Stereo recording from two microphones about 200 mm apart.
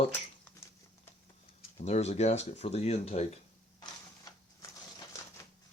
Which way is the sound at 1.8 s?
35° left (ahead or behind).